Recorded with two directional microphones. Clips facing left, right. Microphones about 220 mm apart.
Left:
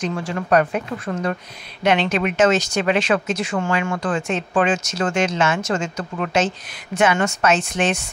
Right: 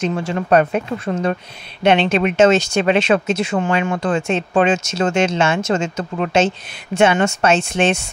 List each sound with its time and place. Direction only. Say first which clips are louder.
0.0 s speech: right 4 dB; 25° right (ahead or behind)